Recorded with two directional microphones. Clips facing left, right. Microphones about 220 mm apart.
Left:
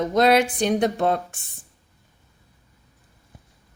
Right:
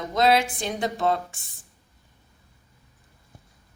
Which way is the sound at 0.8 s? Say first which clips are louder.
Right 1 dB; 55° left (ahead or behind).